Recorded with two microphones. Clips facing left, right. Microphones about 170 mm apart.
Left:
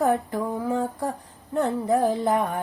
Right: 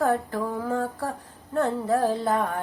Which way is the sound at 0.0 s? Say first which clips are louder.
Left 1 dB; 15° left (ahead or behind).